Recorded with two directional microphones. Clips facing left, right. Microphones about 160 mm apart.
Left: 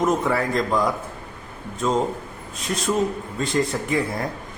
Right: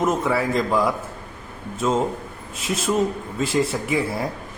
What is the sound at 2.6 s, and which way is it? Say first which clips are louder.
Speech: right 1 dB; 5° right (ahead or behind).